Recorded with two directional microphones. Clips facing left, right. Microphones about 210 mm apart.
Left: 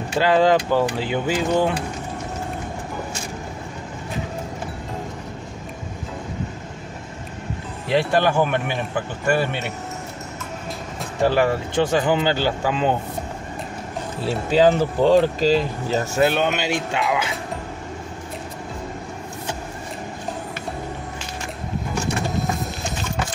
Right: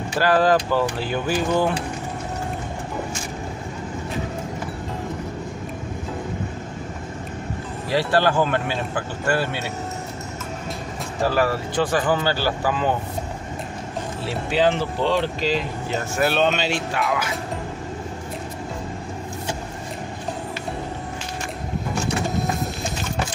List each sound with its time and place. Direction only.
0.2 s speech: 25° left (ahead or behind)
7.9 s speech: 15° left (ahead or behind)
11.2 s speech: 25° left (ahead or behind)
14.5 s speech: 40° left (ahead or behind)
16.2 s speech: 15° left (ahead or behind)